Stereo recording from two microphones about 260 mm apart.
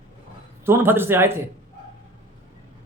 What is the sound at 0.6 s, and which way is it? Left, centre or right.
Speech, centre.